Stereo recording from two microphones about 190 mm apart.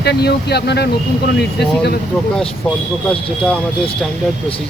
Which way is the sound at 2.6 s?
5° left (ahead or behind).